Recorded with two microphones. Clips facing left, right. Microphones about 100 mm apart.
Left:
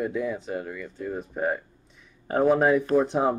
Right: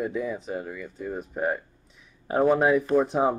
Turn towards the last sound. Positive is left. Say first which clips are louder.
# even
turn(degrees=0)  # may be behind; listen again after turning